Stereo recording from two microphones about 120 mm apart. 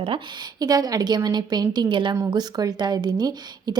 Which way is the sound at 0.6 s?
30° right (ahead or behind).